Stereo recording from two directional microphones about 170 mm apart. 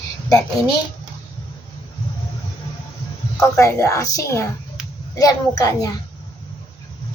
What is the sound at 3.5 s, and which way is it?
A woman's voice, 15° left (ahead or behind).